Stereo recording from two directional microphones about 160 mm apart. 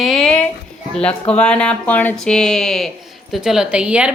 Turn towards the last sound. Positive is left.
turn(degrees=-5)  # may be behind; listen again after turning